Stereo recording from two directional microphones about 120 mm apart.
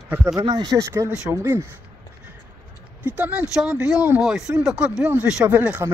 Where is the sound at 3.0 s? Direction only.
10° right (ahead or behind).